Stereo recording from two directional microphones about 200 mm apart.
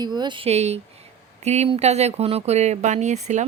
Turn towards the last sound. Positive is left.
turn(degrees=-35)  # may be behind; listen again after turning